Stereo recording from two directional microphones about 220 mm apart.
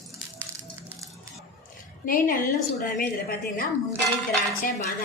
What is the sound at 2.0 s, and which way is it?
Speech, 40° left (ahead or behind).